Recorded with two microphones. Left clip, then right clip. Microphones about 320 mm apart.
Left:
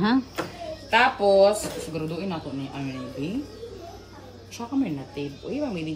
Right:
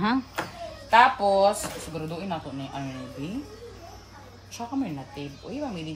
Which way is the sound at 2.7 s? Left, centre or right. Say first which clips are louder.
Left 2 dB; right.